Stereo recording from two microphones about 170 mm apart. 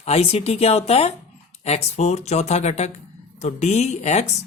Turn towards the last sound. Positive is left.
turn(degrees=40)  # may be behind; listen again after turning